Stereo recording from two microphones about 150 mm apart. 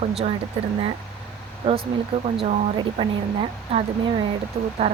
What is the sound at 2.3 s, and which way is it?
Speech, 45° right (ahead or behind).